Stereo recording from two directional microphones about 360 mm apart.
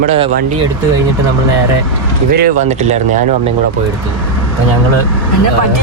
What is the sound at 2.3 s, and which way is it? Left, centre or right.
Speech, right.